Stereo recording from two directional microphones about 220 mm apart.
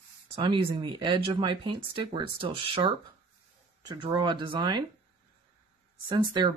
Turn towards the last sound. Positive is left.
turn(degrees=-20)  # may be behind; listen again after turning